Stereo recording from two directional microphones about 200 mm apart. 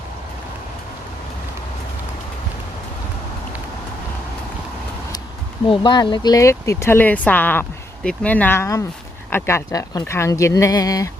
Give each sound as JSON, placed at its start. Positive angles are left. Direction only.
{"t": 5.6, "sound": "speech", "side_deg": 25}